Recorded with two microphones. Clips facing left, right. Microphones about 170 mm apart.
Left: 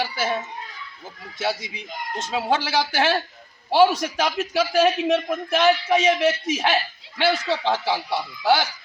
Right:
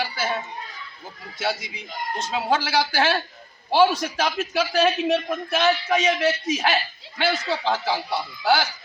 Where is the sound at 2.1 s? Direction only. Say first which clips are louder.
Left 1 dB; 20° left (ahead or behind).